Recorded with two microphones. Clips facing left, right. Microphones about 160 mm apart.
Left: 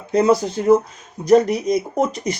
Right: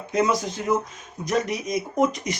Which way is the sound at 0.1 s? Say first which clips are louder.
Left 7 dB; 35° left (ahead or behind).